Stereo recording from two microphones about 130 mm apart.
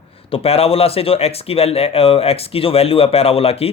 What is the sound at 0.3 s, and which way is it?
Speech, 45° left (ahead or behind).